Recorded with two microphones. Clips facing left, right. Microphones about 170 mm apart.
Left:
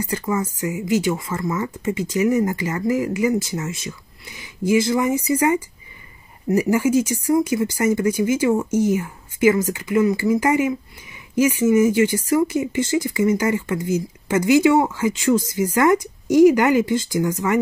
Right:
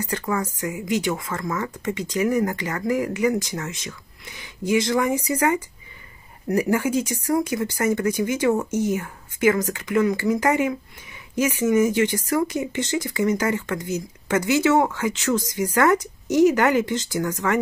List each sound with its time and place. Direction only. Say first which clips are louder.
0.0 s a woman's voice: left 2 dB; 10° left (ahead or behind)